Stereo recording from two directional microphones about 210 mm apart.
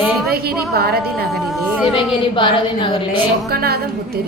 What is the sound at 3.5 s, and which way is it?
Music, 45° right (ahead or behind).